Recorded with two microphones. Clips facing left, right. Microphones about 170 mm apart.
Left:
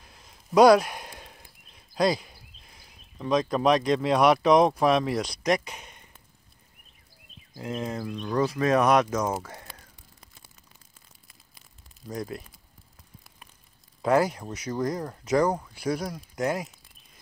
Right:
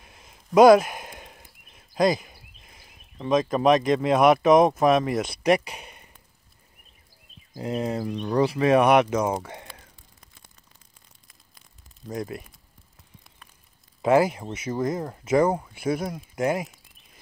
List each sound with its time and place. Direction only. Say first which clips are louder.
0.0 s a sound: right 2 dB; 5° right (ahead or behind)
3.3 s speech: right 3 dB; centre (ahead or behind)
7.6 s speech: right 4 dB; 35° right (ahead or behind)
8.0 s speech: right 2 dB; 15° right (ahead or behind)
12.1 s speech: right 2 dB; centre (ahead or behind)
14.0 s speech: right 3 dB; 5° right (ahead or behind)